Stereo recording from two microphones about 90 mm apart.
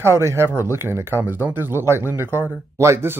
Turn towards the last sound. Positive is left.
turn(degrees=-30)  # may be behind; listen again after turning